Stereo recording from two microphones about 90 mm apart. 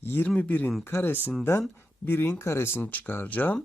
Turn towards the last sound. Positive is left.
turn(degrees=15)  # may be behind; listen again after turning